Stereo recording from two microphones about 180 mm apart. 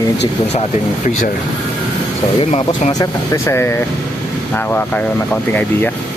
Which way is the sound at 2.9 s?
20° left (ahead or behind).